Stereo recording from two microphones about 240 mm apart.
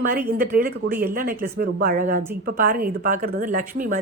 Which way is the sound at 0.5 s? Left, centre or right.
Right.